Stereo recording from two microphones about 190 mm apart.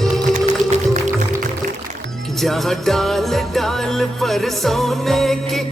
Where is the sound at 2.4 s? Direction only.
Centre (ahead or behind).